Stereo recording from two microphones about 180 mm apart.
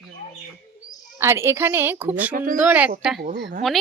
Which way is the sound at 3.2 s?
65° right (ahead or behind).